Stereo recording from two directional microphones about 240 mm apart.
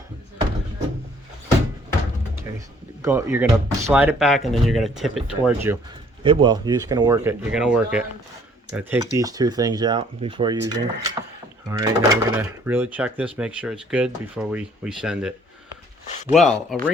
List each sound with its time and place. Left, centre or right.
3.0 s speech: centre
6.2 s speech: centre
16.3 s speech: centre